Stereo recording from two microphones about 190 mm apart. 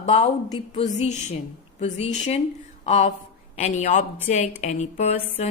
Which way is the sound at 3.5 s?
35° left (ahead or behind).